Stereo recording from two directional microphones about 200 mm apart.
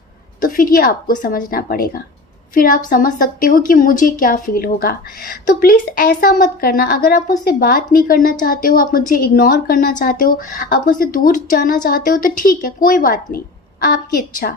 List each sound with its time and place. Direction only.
0.4 s a woman's voice: 45° left (ahead or behind)